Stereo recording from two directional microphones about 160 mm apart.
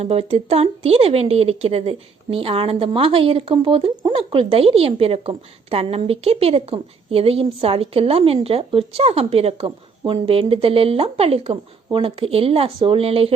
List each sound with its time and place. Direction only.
0.0 s speech: 40° right (ahead or behind)